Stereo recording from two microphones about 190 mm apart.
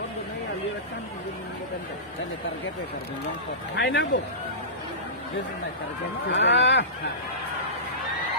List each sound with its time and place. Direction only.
3.8 s speech: 65° left (ahead or behind)
6.2 s speech: 70° left (ahead or behind)